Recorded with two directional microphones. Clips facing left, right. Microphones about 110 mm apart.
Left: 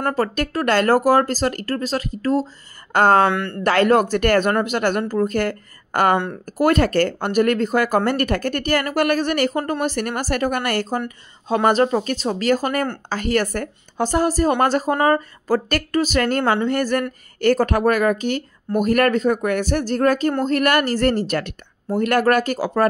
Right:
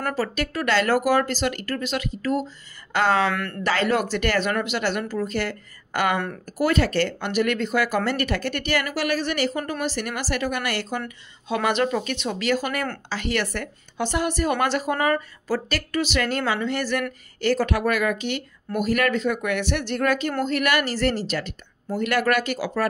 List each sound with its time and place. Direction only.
0.1 s speech: 45° left (ahead or behind)
3.3 s speech: 25° left (ahead or behind)
3.6 s speech: 50° left (ahead or behind); by 15.2 s 35° left (ahead or behind)
15.4 s speech: 45° left (ahead or behind)